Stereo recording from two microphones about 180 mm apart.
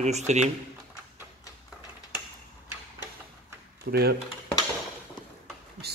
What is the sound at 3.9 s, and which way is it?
Speech, 65° right (ahead or behind).